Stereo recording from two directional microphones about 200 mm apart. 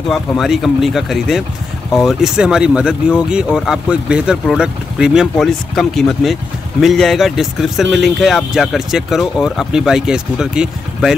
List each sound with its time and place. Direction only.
0.1 s speech: centre (ahead or behind)